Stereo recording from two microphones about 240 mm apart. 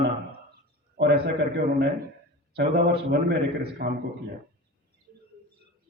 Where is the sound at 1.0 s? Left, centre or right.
Right.